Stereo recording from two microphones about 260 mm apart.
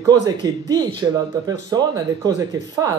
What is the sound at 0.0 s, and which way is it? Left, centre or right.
A man's voice, centre.